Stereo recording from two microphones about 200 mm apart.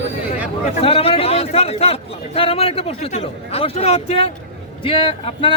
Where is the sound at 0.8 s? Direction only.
30° left (ahead or behind).